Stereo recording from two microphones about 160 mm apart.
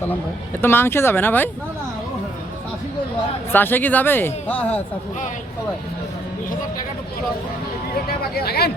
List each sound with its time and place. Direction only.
0.6 s speech: 15° left (ahead or behind)
3.5 s speech: 10° left (ahead or behind)
8.4 s speech: 80° left